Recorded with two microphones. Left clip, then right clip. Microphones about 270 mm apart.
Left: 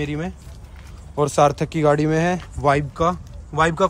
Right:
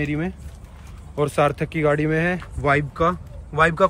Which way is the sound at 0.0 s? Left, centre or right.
Centre.